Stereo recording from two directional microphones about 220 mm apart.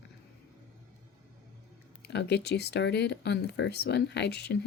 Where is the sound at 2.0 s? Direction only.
50° left (ahead or behind).